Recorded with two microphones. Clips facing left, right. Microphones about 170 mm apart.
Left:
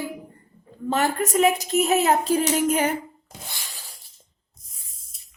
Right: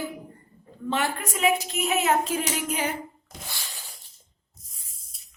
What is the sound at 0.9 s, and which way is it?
A woman's voice, 40° left (ahead or behind).